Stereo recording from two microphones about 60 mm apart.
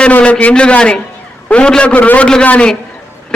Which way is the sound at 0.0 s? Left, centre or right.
Centre.